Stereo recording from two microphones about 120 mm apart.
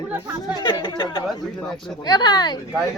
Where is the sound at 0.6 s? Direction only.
40° left (ahead or behind).